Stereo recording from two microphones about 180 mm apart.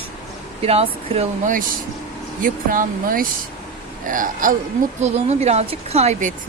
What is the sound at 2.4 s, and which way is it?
Speech, 50° right (ahead or behind).